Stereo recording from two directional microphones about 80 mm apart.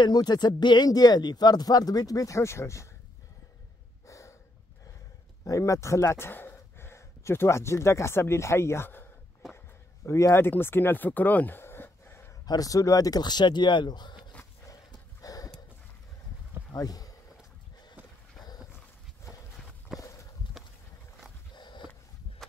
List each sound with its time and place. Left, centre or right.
0.0 s speech: left
4.1 s snort: left
5.4 s speech: left
10.0 s speech: left
12.4 s speech: left
14.7 s horse: left
16.7 s speech: left
20.0 s walk: left
21.5 s sniff: left